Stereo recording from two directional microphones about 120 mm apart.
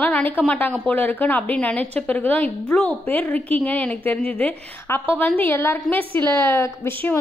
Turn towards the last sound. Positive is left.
turn(degrees=20)  # may be behind; listen again after turning